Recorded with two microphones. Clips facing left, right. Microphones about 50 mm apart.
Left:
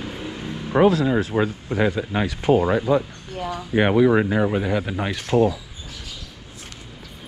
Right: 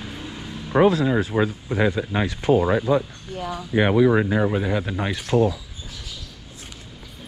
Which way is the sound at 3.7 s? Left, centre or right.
Left.